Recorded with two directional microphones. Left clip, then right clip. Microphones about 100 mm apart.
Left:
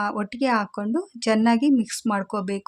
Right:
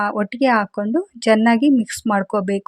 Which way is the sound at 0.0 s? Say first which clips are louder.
Right 6 dB; 40° right (ahead or behind).